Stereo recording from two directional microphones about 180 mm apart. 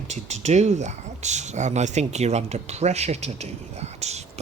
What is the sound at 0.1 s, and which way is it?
Speech, 40° right (ahead or behind).